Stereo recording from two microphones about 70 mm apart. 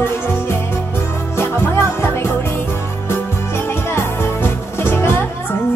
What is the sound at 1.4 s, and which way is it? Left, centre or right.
Music, left.